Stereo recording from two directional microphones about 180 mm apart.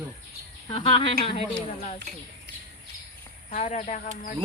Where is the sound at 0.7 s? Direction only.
35° left (ahead or behind).